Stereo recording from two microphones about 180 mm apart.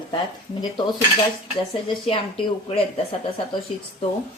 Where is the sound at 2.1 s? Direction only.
30° left (ahead or behind).